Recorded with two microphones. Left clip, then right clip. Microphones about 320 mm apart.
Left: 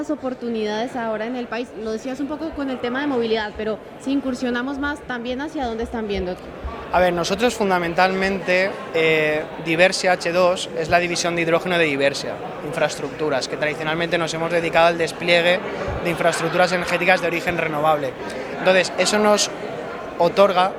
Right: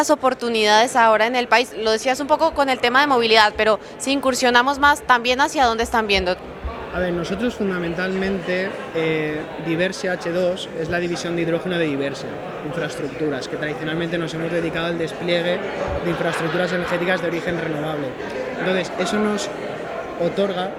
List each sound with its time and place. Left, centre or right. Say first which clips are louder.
0.0 s a woman's voice: right 8 dB; right
6.9 s speech: left 6 dB; left
13.3 s speech: left 3 dB; left
18.6 s speech: left 6 dB; left
20.2 s speech: left 7 dB; left